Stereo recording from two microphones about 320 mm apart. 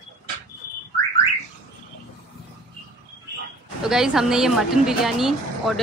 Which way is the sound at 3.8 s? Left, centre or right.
Centre.